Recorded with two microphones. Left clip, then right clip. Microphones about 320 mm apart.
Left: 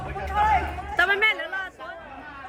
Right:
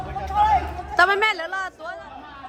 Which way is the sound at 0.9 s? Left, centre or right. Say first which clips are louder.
Right 3 dB; centre.